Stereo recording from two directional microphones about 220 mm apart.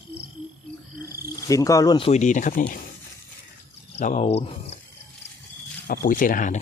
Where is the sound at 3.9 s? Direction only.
30° left (ahead or behind).